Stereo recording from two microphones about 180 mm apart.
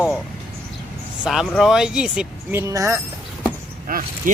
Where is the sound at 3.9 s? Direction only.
50° right (ahead or behind).